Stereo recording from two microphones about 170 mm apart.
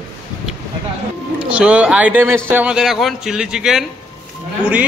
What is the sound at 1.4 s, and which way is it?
A man's voice, 5° right (ahead or behind).